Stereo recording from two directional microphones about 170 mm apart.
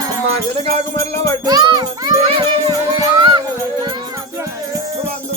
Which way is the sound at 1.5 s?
25° right (ahead or behind).